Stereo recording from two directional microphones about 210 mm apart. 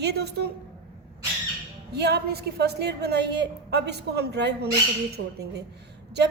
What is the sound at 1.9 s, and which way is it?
Speech, 50° right (ahead or behind).